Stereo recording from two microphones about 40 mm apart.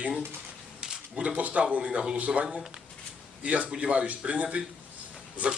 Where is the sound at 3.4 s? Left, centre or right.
Right.